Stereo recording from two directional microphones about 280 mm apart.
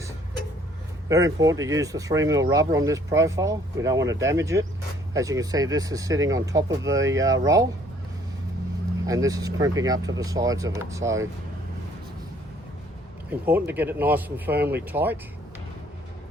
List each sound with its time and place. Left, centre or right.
1.0 s speech: centre
9.0 s speech: centre
13.4 s speech: centre
14.5 s speech: right
14.8 s speech: centre